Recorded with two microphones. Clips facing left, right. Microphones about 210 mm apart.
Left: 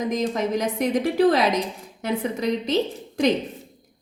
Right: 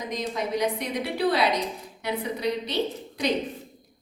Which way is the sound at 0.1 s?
45° left (ahead or behind).